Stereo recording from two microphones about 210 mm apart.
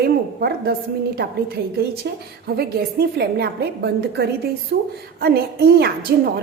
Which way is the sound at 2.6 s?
50° right (ahead or behind).